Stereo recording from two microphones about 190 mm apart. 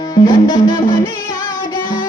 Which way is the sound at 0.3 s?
20° left (ahead or behind).